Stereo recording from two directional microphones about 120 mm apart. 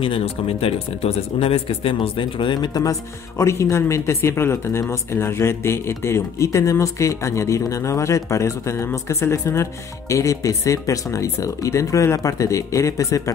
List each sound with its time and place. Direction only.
0.0 s speech: 50° left (ahead or behind); by 13.2 s 25° left (ahead or behind)